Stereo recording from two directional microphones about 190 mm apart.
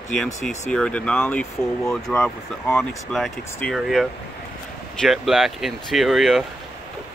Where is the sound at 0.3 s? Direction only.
35° left (ahead or behind).